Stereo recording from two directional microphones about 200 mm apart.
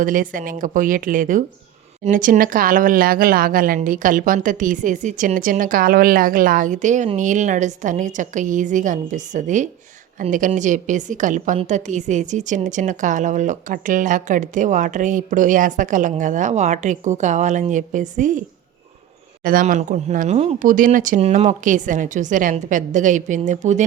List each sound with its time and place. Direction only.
0.0 s a woman's voice: 45° right (ahead or behind)
19.5 s a woman's voice: 45° right (ahead or behind)